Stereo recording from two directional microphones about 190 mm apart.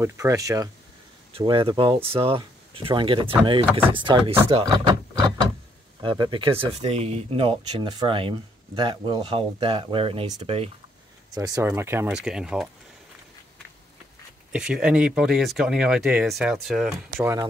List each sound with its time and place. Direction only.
0.0 s speech: 15° right (ahead or behind)
1.3 s speech: 30° right (ahead or behind)
6.0 s speech: 25° right (ahead or behind)
11.3 s speech: 20° right (ahead or behind); by 12.6 s 5° right (ahead or behind)
14.5 s speech: 5° right (ahead or behind)
17.2 s speech: 15° right (ahead or behind)